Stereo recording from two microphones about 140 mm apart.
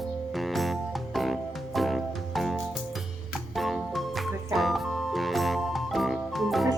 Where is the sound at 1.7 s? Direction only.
Centre (ahead or behind).